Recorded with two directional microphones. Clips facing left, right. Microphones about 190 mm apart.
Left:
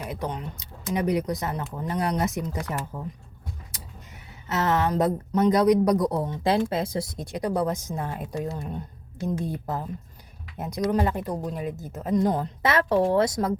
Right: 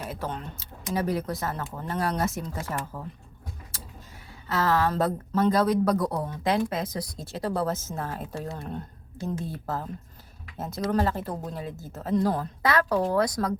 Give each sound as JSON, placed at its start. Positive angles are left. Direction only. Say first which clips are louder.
{"t": 0.0, "sound": "speech", "louder": "left 2 dB", "side_deg": 15}
{"t": 3.7, "sound": "a sound", "louder": "even", "side_deg": 20}
{"t": 4.4, "sound": "a woman's voice", "louder": "left 1 dB", "side_deg": 20}
{"t": 10.9, "sound": "a woman's voice", "louder": "left 1 dB", "side_deg": 15}